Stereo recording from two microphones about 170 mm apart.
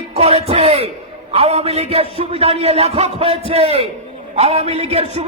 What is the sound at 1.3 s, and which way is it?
A man's voice, 35° right (ahead or behind).